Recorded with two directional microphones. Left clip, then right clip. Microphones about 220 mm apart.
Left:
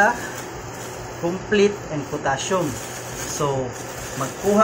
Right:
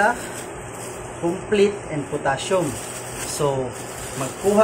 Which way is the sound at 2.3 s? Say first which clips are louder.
Right 1 dB; 15° right (ahead or behind).